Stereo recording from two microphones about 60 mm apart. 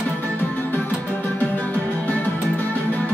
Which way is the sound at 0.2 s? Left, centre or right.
Left.